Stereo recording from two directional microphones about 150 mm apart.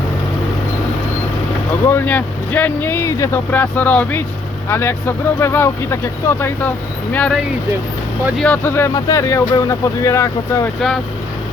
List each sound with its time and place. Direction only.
1.9 s speech: 15° left (ahead or behind)
8.4 s speech: 10° left (ahead or behind)